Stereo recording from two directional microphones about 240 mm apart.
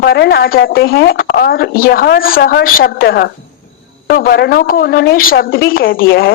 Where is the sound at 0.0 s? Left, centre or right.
Left.